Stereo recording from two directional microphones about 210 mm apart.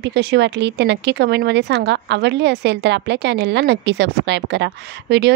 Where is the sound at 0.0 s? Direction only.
55° right (ahead or behind).